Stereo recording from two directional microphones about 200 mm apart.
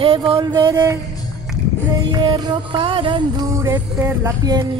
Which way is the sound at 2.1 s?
20° right (ahead or behind).